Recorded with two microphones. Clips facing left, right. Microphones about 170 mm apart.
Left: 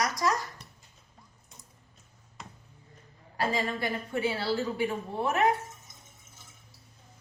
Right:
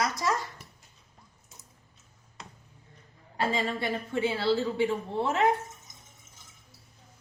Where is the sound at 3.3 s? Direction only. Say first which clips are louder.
Right 1 dB; 25° right (ahead or behind).